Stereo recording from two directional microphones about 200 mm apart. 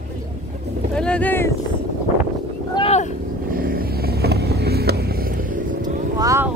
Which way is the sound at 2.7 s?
30° left (ahead or behind).